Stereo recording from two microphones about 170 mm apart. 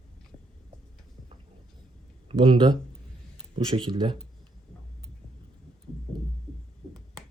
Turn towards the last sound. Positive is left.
turn(degrees=0)  # may be behind; listen again after turning